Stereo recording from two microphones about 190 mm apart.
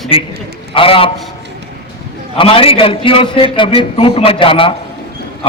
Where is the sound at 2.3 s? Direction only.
30° left (ahead or behind).